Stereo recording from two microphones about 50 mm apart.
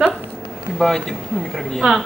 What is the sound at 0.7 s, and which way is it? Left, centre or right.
Speech, centre.